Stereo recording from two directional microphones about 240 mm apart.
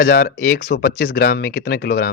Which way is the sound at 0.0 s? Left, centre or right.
Left.